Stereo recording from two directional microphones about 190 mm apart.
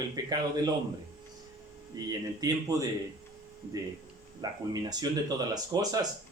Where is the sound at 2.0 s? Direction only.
20° right (ahead or behind).